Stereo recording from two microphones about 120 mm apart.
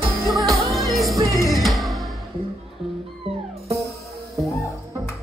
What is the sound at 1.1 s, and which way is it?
Music, 30° right (ahead or behind).